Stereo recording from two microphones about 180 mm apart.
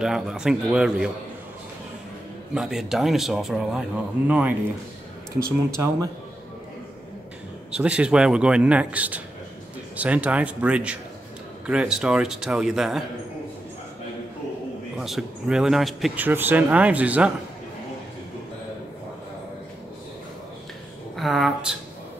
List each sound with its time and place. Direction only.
0.0 s speech: 5° right (ahead or behind)
2.5 s speech: 5° right (ahead or behind)
7.7 s speech: 5° right (ahead or behind)
15.0 s speech: centre (ahead or behind)
21.2 s speech: centre (ahead or behind)